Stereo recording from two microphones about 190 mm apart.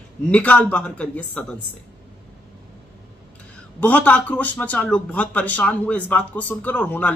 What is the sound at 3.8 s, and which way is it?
Speech, 10° left (ahead or behind).